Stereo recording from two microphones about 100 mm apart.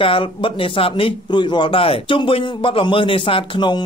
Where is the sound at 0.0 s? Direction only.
60° left (ahead or behind).